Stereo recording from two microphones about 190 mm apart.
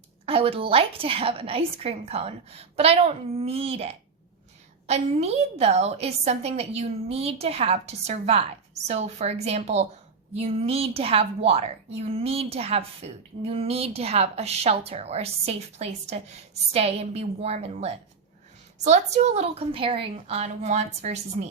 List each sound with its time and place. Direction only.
0.3 s a woman's voice: 30° right (ahead or behind)